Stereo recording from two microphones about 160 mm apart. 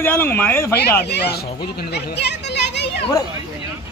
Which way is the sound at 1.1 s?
90° left.